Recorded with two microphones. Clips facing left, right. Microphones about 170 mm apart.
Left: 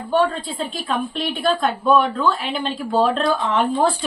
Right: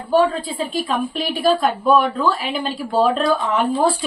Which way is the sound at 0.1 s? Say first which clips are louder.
Right 3 dB; 5° right (ahead or behind).